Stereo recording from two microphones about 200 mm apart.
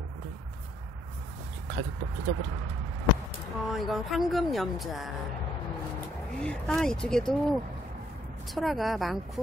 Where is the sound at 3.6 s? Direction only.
Centre (ahead or behind).